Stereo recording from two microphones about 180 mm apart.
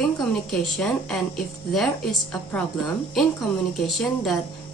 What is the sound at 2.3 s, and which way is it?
Speech, 5° left (ahead or behind).